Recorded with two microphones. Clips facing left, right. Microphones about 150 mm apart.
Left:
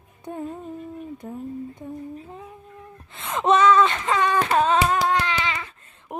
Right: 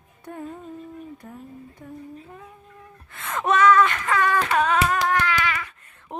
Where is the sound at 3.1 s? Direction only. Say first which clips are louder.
Left 3 dB; 20° left (ahead or behind).